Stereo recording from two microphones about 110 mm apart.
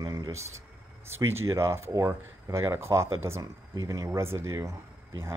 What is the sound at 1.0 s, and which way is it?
Speech, 20° right (ahead or behind).